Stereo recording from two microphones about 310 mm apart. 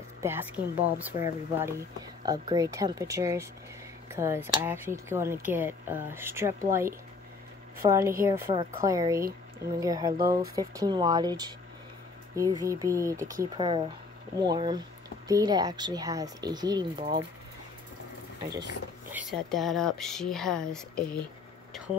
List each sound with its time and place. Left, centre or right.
0.2 s a woman's voice: centre
19.1 s speech: centre